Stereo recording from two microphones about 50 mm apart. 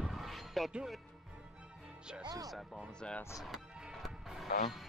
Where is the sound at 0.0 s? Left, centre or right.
Centre.